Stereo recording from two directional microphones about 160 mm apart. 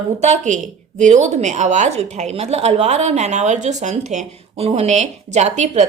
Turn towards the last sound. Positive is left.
turn(degrees=-45)  # may be behind; listen again after turning